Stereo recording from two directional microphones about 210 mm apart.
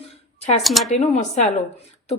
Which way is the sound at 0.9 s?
30° left (ahead or behind).